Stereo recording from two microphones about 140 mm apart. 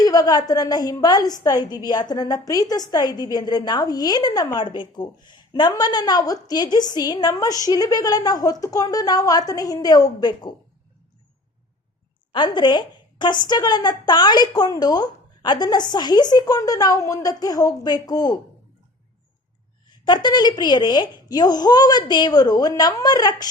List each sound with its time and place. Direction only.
0.0 s a woman's voice: 25° left (ahead or behind)
12.3 s a woman's voice: 30° left (ahead or behind)
19.9 s a woman's voice: 30° left (ahead or behind)